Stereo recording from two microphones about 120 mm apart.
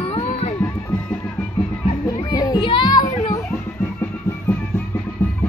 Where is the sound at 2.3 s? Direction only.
30° left (ahead or behind).